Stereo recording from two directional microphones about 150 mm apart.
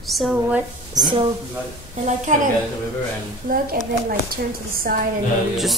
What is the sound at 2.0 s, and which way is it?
Speech, 55° right (ahead or behind).